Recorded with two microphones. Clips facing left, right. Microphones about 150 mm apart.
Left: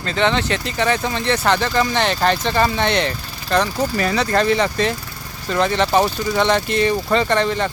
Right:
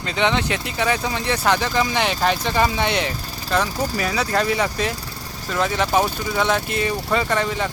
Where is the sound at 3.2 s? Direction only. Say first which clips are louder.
Right 1 dB; 40° right (ahead or behind).